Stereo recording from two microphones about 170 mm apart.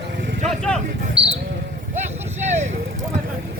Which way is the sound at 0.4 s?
5° left (ahead or behind).